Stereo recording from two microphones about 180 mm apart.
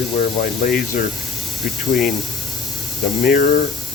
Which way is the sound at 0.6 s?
50° left (ahead or behind).